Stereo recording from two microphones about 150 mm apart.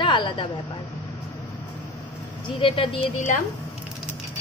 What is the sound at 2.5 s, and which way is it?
Speech, 35° left (ahead or behind).